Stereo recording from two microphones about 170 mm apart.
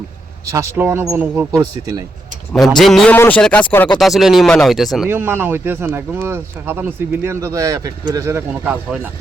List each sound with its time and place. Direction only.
0.5 s speech: 15° right (ahead or behind)
2.6 s speech: centre (ahead or behind)
3.9 s speech: centre (ahead or behind)
5.0 s speech: 15° right (ahead or behind)